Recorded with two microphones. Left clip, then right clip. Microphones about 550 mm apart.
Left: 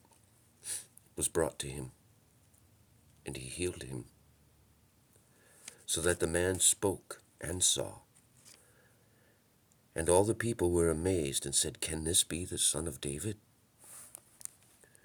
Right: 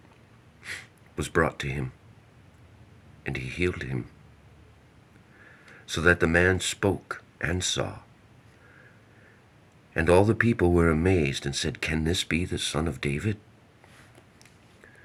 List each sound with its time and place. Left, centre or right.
0.6 s a sound: left
3.2 s speech: left
5.9 s speech: left
10.0 s speech: left